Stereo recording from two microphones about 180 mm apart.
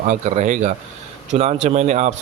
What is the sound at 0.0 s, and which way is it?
Speech, 40° right (ahead or behind).